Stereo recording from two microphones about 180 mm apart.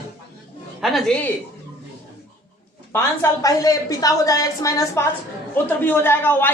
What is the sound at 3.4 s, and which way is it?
A woman's voice, 20° left (ahead or behind).